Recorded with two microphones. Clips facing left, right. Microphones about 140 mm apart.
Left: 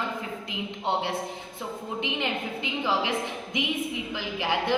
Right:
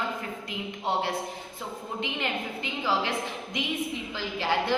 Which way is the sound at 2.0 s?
20° left (ahead or behind).